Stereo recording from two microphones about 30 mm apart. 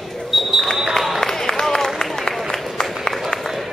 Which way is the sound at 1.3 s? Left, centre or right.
Centre.